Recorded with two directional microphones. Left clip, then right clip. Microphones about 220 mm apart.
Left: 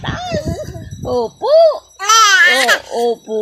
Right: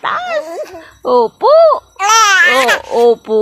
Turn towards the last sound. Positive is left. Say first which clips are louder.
# right 7 dB
turn(degrees=-20)  # may be behind; listen again after turning